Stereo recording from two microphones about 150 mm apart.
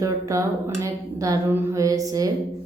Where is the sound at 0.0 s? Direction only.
20° right (ahead or behind).